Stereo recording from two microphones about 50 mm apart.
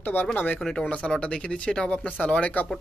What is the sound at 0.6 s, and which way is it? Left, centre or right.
Speech, centre.